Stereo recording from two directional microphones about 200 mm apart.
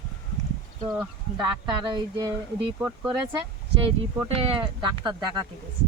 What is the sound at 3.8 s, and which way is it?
Speech, 30° right (ahead or behind).